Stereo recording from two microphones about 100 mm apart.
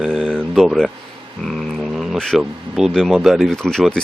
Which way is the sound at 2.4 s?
5° right (ahead or behind).